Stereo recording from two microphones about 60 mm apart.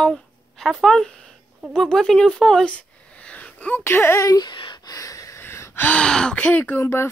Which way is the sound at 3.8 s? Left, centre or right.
Left.